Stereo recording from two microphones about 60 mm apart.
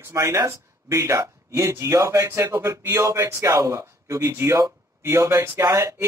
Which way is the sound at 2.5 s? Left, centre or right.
Right.